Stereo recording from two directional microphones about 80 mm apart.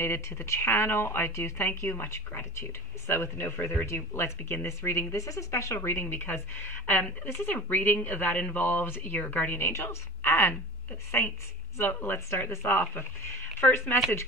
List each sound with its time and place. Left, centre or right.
0.0 s speech: left